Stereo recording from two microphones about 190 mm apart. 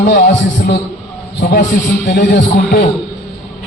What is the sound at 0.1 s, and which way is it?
A man's voice, 55° left (ahead or behind).